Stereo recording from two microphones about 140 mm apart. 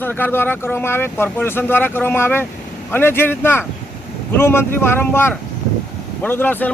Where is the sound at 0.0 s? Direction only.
15° left (ahead or behind).